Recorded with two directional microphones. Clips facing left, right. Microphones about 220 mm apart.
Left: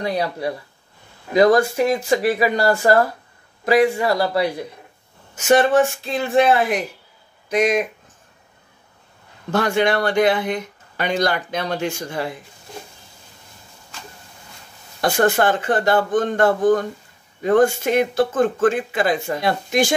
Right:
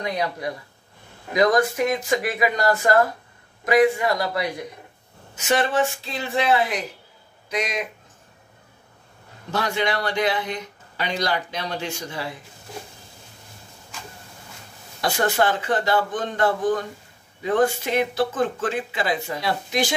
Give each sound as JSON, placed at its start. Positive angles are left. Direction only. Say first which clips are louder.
{"t": 0.0, "sound": "speech", "louder": "left 4 dB", "side_deg": 30}
{"t": 5.3, "sound": "a man's voice", "louder": "left 7 dB", "side_deg": 50}
{"t": 9.5, "sound": "speech", "louder": "left 6 dB", "side_deg": 50}
{"t": 15.0, "sound": "speech", "louder": "left 4 dB", "side_deg": 50}